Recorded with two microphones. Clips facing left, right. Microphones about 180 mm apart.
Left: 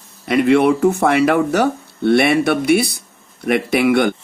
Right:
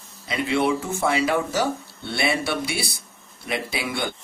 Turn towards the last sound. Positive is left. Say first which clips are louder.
# left 13 dB
turn(degrees=65)  # may be behind; listen again after turning